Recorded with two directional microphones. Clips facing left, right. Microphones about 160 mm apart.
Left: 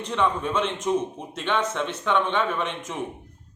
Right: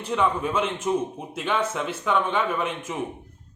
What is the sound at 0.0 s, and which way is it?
A man's voice, 5° right (ahead or behind).